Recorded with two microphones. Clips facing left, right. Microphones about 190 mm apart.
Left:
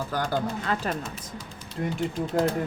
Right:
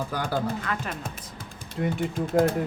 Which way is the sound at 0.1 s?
10° right (ahead or behind).